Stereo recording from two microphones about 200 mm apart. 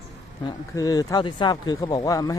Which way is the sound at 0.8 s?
20° left (ahead or behind).